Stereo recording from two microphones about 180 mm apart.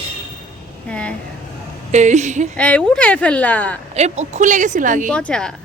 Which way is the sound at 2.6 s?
5° left (ahead or behind).